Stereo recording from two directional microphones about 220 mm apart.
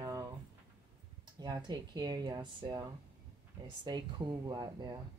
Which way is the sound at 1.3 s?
20° right (ahead or behind).